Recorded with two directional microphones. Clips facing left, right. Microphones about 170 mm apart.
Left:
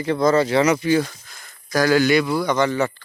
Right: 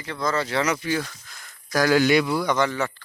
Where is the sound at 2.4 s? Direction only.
5° right (ahead or behind).